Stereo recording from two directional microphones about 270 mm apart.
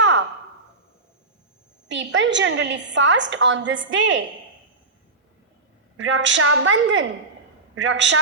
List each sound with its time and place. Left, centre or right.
0.0 s a sound: right
1.9 s a woman's voice: right
6.1 s a woman's voice: right